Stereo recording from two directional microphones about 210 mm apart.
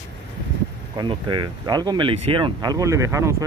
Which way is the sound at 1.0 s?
20° right (ahead or behind).